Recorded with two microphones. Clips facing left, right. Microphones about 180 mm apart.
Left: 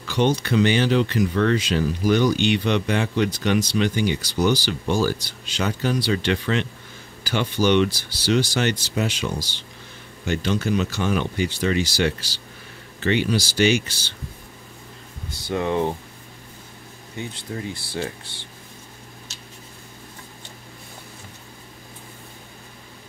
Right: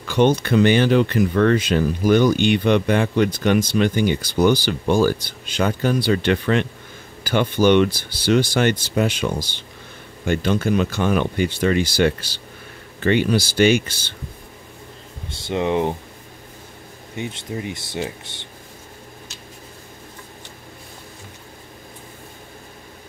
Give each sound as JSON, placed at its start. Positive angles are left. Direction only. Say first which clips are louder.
{"t": 0.1, "sound": "speech", "louder": "right 4 dB", "side_deg": -55}
{"t": 15.2, "sound": "speech", "louder": "right 2 dB", "side_deg": -25}
{"t": 17.1, "sound": "speech", "louder": "right 3 dB", "side_deg": -20}